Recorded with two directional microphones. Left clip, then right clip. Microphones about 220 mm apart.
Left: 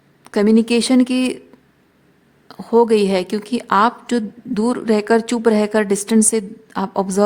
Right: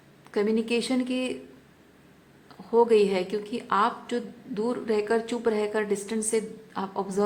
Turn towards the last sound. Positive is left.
turn(degrees=50)  # may be behind; listen again after turning